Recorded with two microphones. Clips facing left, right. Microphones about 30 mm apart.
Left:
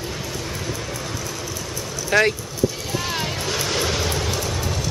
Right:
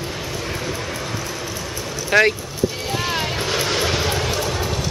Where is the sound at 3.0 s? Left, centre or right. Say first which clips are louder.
Right 3 dB; centre.